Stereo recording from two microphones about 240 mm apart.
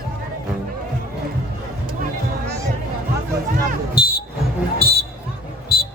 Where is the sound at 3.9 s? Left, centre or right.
Left.